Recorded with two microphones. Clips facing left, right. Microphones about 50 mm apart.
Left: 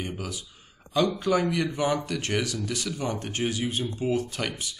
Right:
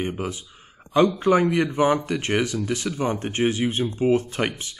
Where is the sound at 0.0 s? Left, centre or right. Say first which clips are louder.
Right 6 dB; right.